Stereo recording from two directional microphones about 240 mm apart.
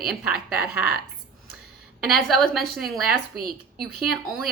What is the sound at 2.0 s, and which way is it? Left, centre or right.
A woman's voice, centre.